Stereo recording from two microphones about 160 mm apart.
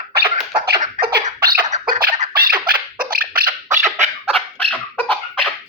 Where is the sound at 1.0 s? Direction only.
50° right (ahead or behind).